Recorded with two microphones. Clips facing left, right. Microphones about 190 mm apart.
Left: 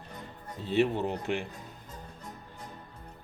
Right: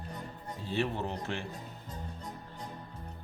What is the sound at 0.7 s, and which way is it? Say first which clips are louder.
Speech: left 6 dB; 15° left (ahead or behind).